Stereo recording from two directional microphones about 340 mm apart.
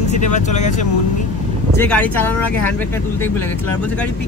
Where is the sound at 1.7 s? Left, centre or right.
Centre.